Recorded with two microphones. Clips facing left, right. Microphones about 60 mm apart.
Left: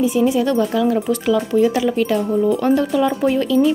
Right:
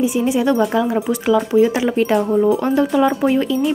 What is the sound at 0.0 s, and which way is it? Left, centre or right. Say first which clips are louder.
Speech: left 1 dB; centre.